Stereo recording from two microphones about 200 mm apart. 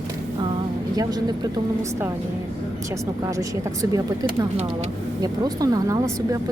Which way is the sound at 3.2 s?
15° right (ahead or behind).